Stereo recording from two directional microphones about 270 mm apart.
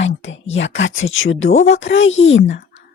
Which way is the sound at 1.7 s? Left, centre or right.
Left.